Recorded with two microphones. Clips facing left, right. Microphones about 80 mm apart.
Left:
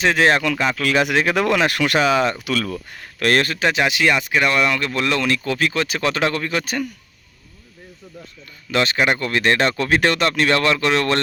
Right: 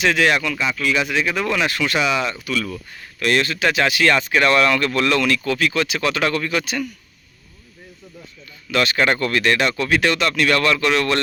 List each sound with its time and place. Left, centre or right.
0.0 s speech: left
0.4 s speech: left
2.0 s speech: left
2.4 s speech: left
3.6 s speech: left
8.7 s speech: left
9.0 s speech: centre
9.4 s speech: left